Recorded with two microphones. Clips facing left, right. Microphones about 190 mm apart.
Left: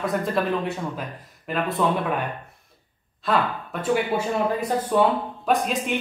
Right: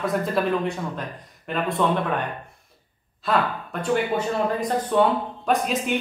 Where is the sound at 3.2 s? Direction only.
Centre (ahead or behind).